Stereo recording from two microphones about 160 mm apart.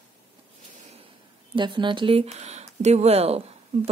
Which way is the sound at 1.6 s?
30° right (ahead or behind).